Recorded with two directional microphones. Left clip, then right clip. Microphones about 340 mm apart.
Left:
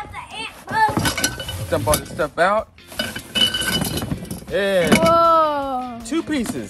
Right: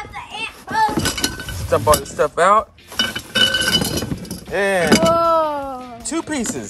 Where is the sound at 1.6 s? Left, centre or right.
Centre.